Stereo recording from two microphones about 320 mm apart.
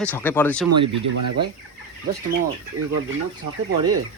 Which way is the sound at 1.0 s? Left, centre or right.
Right.